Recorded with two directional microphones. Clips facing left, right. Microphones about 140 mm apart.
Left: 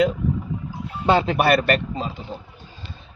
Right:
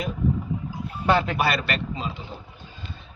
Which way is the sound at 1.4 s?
55° left (ahead or behind).